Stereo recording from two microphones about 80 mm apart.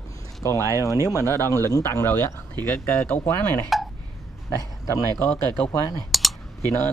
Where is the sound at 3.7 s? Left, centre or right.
Centre.